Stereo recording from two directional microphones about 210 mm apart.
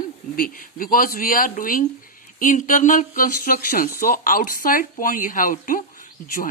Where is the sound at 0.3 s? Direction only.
40° left (ahead or behind).